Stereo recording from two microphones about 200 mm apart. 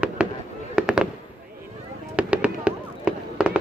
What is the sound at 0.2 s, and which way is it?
Fireworks, 5° right (ahead or behind).